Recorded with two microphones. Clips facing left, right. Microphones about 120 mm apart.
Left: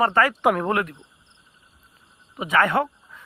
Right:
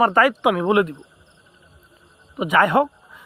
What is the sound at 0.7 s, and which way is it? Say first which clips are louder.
Cricket: right 6 dB; 20° right (ahead or behind).